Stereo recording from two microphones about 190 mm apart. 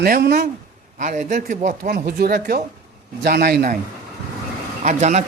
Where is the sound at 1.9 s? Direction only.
55° right (ahead or behind).